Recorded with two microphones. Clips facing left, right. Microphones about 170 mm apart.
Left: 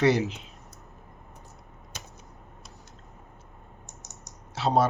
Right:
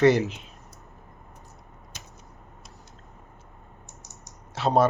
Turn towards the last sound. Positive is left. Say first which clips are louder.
# right 2 dB
turn(degrees=-50)  # may be behind; listen again after turning